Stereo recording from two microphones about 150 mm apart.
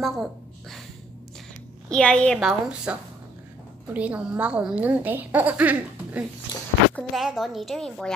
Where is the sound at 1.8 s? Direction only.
5° left (ahead or behind).